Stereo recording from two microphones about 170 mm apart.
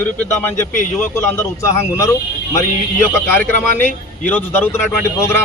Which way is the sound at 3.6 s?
10° left (ahead or behind).